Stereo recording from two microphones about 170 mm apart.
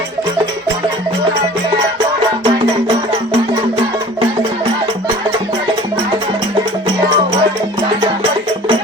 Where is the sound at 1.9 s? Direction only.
25° right (ahead or behind).